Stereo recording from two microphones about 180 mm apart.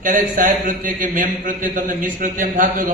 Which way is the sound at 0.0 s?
45° right (ahead or behind).